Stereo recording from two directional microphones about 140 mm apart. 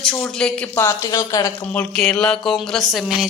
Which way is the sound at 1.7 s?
5° left (ahead or behind).